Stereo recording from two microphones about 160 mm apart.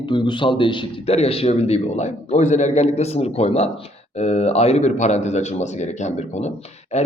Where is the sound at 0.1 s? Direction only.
30° left (ahead or behind).